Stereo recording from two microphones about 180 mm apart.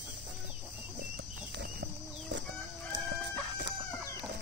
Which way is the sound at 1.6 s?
65° right (ahead or behind).